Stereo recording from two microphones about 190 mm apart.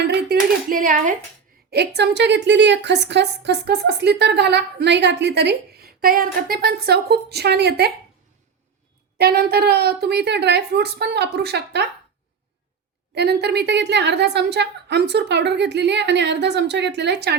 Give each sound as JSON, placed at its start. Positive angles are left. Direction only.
{"t": 0.0, "sound": "speech", "side_deg": -60}
{"t": 1.7, "sound": "a woman's voice", "side_deg": -60}
{"t": 9.1, "sound": "a woman's voice", "side_deg": -55}
{"t": 13.1, "sound": "a woman's voice", "side_deg": -60}